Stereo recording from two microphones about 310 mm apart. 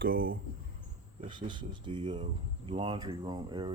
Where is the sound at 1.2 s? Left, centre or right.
Centre.